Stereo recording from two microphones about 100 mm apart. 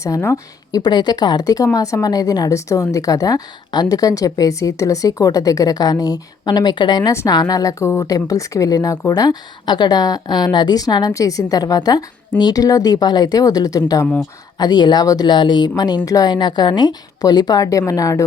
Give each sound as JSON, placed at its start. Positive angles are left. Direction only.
{"t": 0.0, "sound": "a woman's voice", "side_deg": 30}
{"t": 0.8, "sound": "speech", "side_deg": 45}
{"t": 7.1, "sound": "a woman's voice", "side_deg": 30}